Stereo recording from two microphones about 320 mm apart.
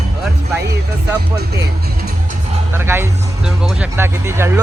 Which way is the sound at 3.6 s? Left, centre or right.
Centre.